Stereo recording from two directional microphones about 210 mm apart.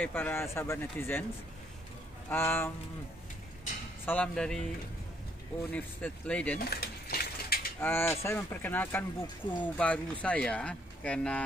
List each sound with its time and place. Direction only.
0.0 s speech: 10° left (ahead or behind)
2.2 s speech: 10° left (ahead or behind)
4.0 s speech: 10° left (ahead or behind)
5.7 s speech: 5° left (ahead or behind)
6.6 s keys jangling: 45° left (ahead or behind)
7.8 s speech: 10° left (ahead or behind)